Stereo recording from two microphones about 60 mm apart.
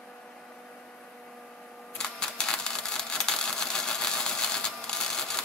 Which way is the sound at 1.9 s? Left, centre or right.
Centre.